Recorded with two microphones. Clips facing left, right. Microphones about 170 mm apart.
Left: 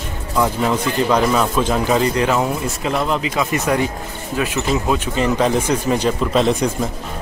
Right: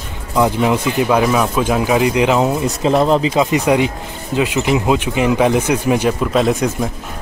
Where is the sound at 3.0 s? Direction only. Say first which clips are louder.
Right 6 dB; 30° right (ahead or behind); by 6.6 s 5° right (ahead or behind).